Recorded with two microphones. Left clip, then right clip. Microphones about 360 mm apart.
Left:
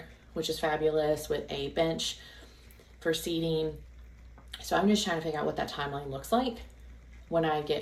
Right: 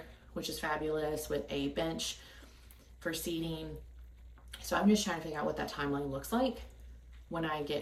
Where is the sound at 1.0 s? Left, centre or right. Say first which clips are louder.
Left 8 dB; left.